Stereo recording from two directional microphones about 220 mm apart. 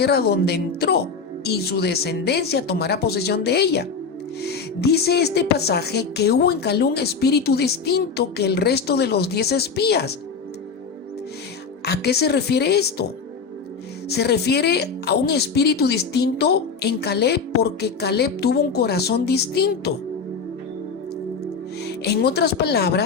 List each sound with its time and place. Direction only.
0.0 s speech: 45° left (ahead or behind)
11.9 s speech: 45° left (ahead or behind)
14.1 s speech: 50° left (ahead or behind)
21.8 s speech: 50° left (ahead or behind)